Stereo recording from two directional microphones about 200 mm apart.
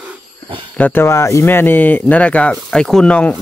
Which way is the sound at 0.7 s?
10° left (ahead or behind).